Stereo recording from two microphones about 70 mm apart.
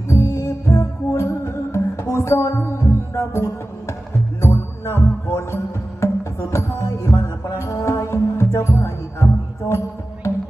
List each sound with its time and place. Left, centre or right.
0.1 s music: left